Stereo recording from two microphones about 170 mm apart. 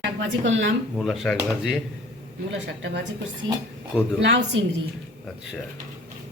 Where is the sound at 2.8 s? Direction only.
90° right.